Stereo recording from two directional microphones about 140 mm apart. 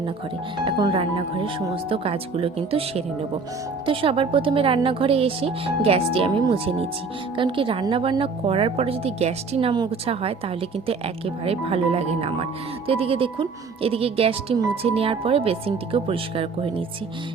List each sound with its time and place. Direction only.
0.6 s a woman's voice: 35° right (ahead or behind)
11.4 s a woman's voice: 45° right (ahead or behind)